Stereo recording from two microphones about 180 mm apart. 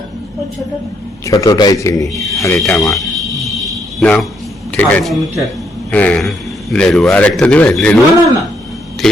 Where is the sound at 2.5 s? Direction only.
Centre (ahead or behind).